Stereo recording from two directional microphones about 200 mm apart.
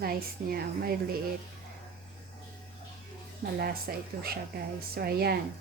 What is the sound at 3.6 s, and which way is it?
Speech, 50° right (ahead or behind).